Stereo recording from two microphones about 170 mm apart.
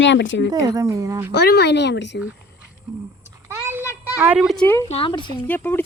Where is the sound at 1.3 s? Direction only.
75° left (ahead or behind); by 2.2 s 90° left.